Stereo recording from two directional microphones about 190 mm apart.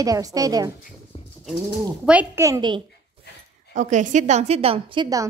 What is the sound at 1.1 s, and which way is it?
Bird, 30° left (ahead or behind).